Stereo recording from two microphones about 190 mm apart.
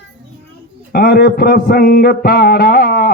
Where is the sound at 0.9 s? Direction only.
55° left (ahead or behind).